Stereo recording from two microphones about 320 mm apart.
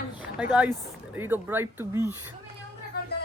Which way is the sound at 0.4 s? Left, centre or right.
Centre.